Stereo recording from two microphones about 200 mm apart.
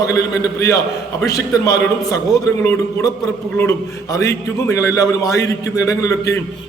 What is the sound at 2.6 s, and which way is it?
Speech, 10° left (ahead or behind).